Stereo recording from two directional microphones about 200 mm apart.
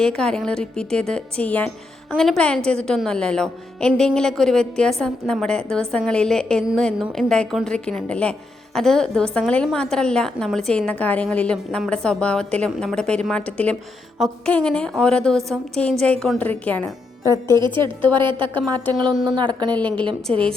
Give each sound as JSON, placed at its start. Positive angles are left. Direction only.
{"t": 0.0, "sound": "a woman's voice", "side_deg": 5}
{"t": 17.7, "sound": "a woman's voice", "side_deg": -25}
{"t": 19.7, "sound": "a woman's voice", "side_deg": 5}
{"t": 20.3, "sound": "a woman's voice", "side_deg": -30}